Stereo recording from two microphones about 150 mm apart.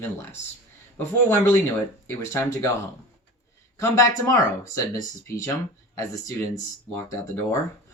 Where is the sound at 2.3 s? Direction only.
20° left (ahead or behind).